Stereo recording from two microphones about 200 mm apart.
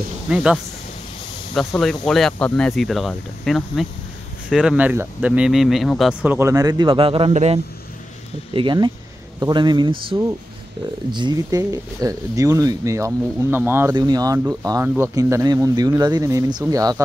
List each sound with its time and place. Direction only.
0.3 s speech: 5° right (ahead or behind)
1.7 s speech: centre (ahead or behind); by 17.0 s 15° right (ahead or behind)